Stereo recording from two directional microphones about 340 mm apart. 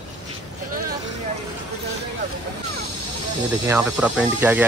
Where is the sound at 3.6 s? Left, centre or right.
Centre.